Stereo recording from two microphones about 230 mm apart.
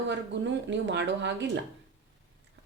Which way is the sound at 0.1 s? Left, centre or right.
Right.